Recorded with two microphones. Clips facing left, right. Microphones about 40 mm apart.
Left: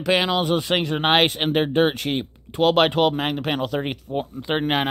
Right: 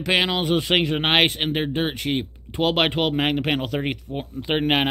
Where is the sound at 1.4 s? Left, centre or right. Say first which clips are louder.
Left 4 dB; centre.